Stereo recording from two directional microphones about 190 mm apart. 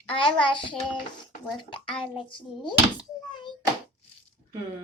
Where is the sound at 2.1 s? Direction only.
25° left (ahead or behind).